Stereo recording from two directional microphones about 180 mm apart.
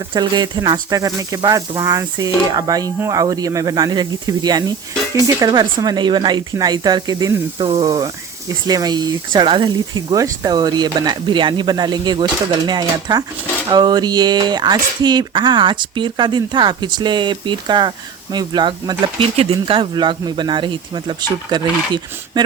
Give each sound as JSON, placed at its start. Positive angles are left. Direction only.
{"t": 0.1, "sound": "speech", "side_deg": -25}